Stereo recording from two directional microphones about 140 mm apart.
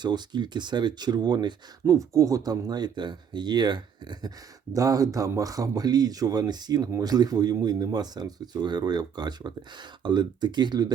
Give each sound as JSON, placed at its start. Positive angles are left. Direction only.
{"t": 0.0, "sound": "speech", "side_deg": -30}